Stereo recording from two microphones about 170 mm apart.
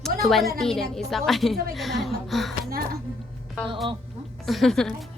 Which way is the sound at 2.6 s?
60° right (ahead or behind).